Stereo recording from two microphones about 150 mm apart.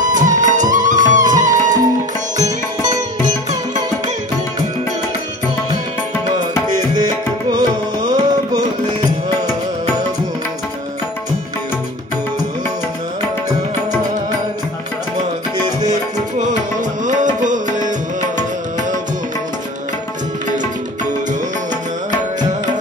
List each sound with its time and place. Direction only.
0.0 s music: 55° right (ahead or behind)
7.5 s music: 30° right (ahead or behind)
15.5 s tabla: 25° right (ahead or behind)
15.9 s music: 55° right (ahead or behind)
17.4 s tabla: 55° right (ahead or behind)